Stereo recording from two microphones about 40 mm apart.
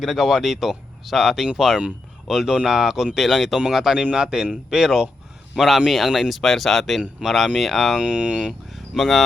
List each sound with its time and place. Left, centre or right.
0.0 s speech: centre
7.9 s speech: right
8.7 s speech: centre